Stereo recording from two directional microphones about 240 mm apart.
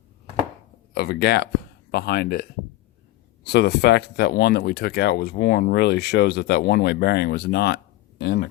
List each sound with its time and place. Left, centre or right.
0.9 s speech: left